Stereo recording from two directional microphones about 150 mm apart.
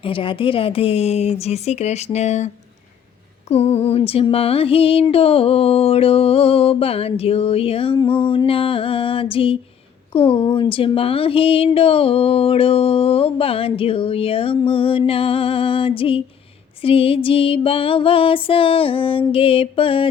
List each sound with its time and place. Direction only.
0.0 s speech: 35° left (ahead or behind)
3.5 s speech: 45° left (ahead or behind)